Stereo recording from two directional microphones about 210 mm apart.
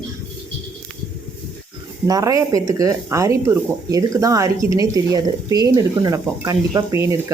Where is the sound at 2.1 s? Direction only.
15° right (ahead or behind).